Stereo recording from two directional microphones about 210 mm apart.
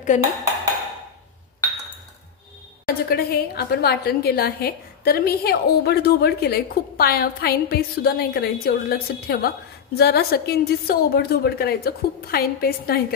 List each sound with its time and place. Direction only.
0.1 s dishes: 35° left (ahead or behind)
2.9 s a woman's voice: 45° left (ahead or behind)